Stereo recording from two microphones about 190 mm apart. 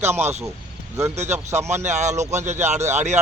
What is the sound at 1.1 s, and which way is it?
Speech, 35° right (ahead or behind).